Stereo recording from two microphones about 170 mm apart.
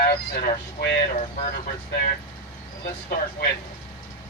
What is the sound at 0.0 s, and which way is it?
Speech, 60° left (ahead or behind).